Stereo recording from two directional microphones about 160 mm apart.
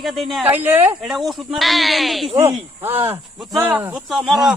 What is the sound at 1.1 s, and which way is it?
Speech, centre (ahead or behind).